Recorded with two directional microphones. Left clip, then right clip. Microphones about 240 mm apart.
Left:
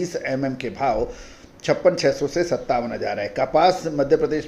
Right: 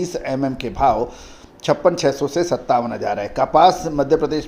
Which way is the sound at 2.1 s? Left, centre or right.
Centre.